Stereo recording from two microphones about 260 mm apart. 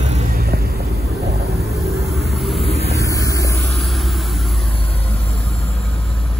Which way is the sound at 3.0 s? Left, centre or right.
Centre.